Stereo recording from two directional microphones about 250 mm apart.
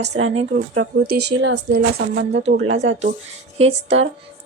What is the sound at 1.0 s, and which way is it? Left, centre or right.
Speech, right.